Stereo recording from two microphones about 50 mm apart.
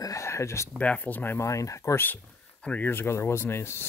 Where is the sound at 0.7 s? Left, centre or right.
Left.